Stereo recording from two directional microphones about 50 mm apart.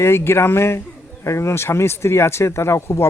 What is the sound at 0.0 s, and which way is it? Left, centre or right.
Speech, left.